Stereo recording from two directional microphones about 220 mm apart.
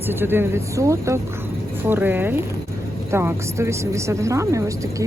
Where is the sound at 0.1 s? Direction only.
10° right (ahead or behind).